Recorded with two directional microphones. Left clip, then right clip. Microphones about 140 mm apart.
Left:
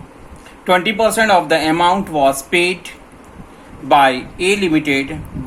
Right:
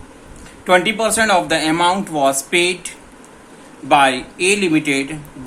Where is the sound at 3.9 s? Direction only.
25° left (ahead or behind).